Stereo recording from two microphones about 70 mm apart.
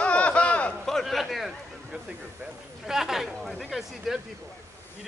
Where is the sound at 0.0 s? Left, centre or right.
Centre.